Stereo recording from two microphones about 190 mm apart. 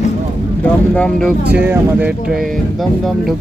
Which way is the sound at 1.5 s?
10° right (ahead or behind).